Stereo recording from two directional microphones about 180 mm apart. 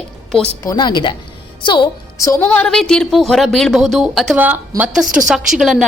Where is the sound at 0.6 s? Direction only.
20° left (ahead or behind).